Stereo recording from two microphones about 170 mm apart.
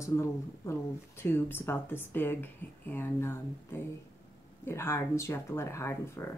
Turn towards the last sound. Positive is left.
turn(degrees=15)  # may be behind; listen again after turning